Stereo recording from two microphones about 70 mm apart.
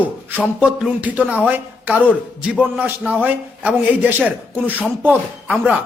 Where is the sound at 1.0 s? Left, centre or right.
Right.